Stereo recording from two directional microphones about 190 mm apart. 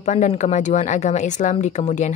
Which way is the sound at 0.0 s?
40° left (ahead or behind).